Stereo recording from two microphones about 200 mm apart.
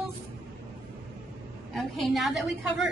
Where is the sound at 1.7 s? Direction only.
Centre (ahead or behind).